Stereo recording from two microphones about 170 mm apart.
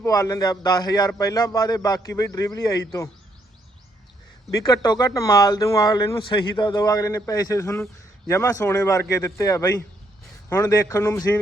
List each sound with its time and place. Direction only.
0.0 s speech: 20° left (ahead or behind)
4.5 s a man's voice: 20° left (ahead or behind)